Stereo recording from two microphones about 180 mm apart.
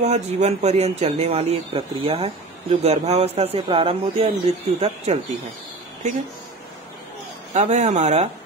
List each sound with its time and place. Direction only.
0.0 s speech: 40° right (ahead or behind)
7.5 s speech: 40° right (ahead or behind)